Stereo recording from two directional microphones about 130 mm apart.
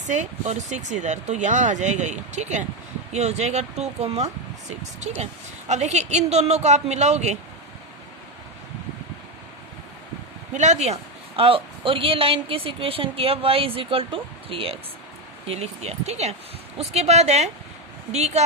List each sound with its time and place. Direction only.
0.1 s a woman's voice: 65° right (ahead or behind)
10.5 s a woman's voice: 65° right (ahead or behind)
11.3 s a woman's voice: 45° right (ahead or behind)